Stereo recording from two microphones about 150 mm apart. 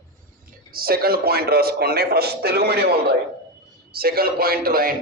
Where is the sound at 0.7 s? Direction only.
85° right.